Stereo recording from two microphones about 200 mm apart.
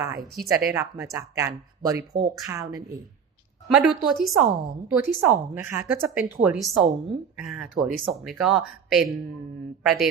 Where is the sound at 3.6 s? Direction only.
Centre (ahead or behind).